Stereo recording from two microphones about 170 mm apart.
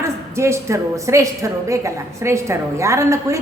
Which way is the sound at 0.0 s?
15° right (ahead or behind).